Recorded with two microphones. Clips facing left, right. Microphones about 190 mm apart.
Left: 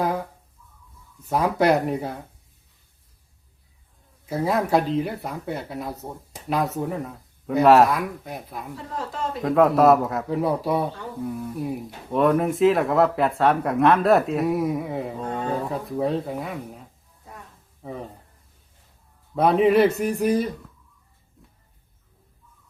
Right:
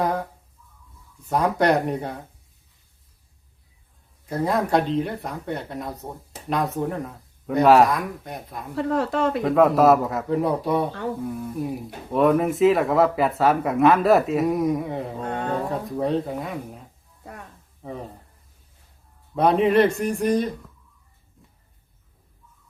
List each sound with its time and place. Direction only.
1.3 s speech: centre (ahead or behind)
4.3 s speech: 5° left (ahead or behind)
8.7 s speech: 70° right (ahead or behind)
9.4 s speech: centre (ahead or behind)
19.4 s speech: centre (ahead or behind)